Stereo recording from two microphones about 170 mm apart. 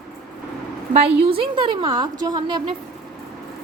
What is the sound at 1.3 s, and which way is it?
A woman's voice, 30° right (ahead or behind).